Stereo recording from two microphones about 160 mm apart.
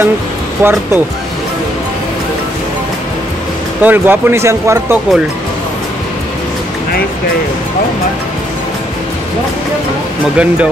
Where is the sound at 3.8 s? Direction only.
15° right (ahead or behind).